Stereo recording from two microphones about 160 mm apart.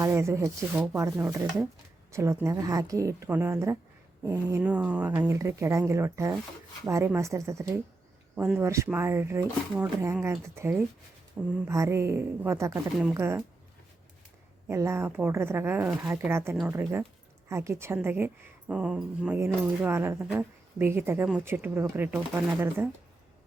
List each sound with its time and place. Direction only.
0.0 s a woman's voice: 15° right (ahead or behind)
4.6 s a woman's voice: 10° right (ahead or behind)
14.7 s speech: 15° right (ahead or behind)